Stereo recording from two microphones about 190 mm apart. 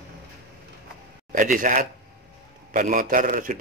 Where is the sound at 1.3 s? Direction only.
45° right (ahead or behind).